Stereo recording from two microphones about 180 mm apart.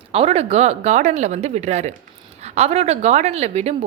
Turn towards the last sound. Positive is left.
turn(degrees=-35)  # may be behind; listen again after turning